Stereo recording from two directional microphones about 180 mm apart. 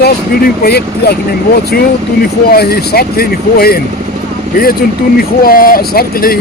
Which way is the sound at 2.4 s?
60° left (ahead or behind).